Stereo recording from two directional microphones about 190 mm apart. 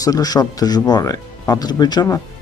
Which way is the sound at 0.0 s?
20° left (ahead or behind).